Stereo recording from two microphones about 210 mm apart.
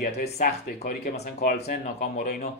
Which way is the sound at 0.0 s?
40° left (ahead or behind).